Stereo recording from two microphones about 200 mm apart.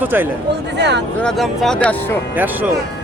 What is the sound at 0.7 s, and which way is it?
Speech, 60° right (ahead or behind).